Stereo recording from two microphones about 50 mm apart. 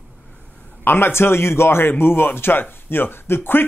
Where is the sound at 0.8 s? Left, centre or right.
Left.